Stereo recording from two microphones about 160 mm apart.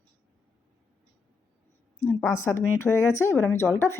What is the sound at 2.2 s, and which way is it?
Speech, 20° left (ahead or behind).